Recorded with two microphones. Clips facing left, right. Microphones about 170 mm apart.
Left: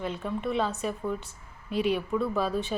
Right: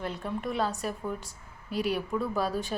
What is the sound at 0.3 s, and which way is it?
A woman's voice, centre (ahead or behind).